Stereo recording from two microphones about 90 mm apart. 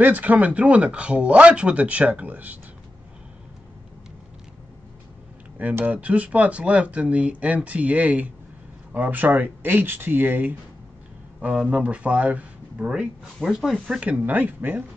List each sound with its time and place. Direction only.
0.0 s speech: 20° right (ahead or behind)
5.6 s speech: 20° right (ahead or behind)
11.7 s speech: 15° right (ahead or behind)
13.8 s speech: 15° right (ahead or behind)